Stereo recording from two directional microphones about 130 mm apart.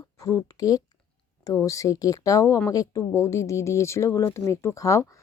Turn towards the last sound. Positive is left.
turn(degrees=25)  # may be behind; listen again after turning